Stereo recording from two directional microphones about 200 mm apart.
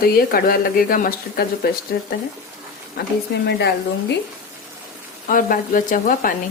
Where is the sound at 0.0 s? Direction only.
50° left (ahead or behind).